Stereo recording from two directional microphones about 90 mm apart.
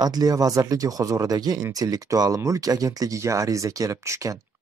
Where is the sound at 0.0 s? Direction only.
45° right (ahead or behind).